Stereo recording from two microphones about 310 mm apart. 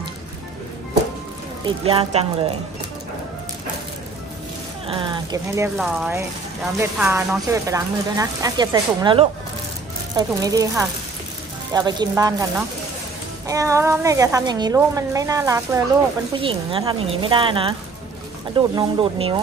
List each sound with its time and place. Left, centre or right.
1.9 s speech: centre
4.8 s speech: centre
5.8 s speech: centre